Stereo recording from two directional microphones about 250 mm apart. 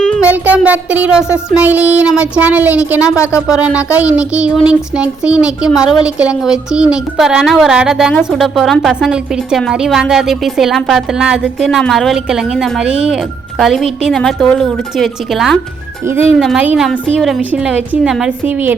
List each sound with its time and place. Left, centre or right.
0.0 s music: centre
1.5 s a woman's voice: centre